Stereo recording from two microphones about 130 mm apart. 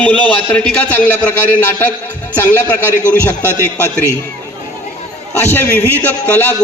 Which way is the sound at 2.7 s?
15° left (ahead or behind).